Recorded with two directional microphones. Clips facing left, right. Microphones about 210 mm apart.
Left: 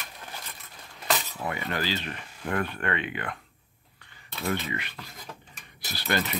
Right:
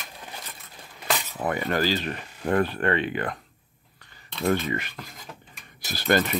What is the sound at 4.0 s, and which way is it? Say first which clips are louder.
Cutlery: right 6 dB; 45° right (ahead or behind).